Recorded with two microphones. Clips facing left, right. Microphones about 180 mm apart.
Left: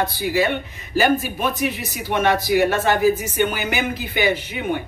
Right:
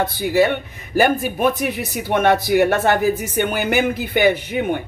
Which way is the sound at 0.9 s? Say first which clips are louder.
Right 2 dB; 55° right (ahead or behind).